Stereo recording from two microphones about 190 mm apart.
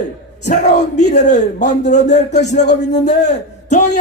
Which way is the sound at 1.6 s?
65° left (ahead or behind).